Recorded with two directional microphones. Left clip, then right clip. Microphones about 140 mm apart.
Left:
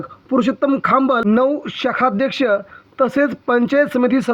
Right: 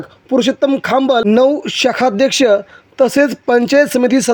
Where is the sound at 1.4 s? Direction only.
60° right (ahead or behind).